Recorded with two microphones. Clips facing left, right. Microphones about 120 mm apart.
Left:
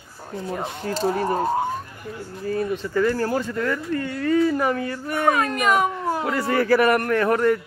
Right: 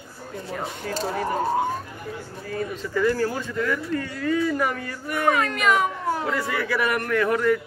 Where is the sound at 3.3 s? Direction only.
30° left (ahead or behind).